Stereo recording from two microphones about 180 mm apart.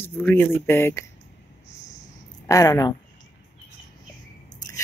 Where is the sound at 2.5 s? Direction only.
20° left (ahead or behind).